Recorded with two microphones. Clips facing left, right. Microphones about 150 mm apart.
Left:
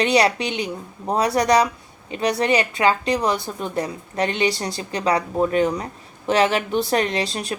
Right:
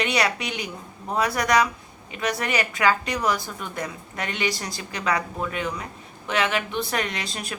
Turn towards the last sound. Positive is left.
turn(degrees=30)  # may be behind; listen again after turning